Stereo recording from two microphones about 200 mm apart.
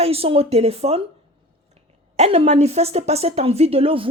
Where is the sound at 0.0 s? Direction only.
30° right (ahead or behind).